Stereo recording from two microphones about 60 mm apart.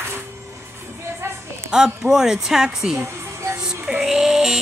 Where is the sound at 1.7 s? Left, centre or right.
Centre.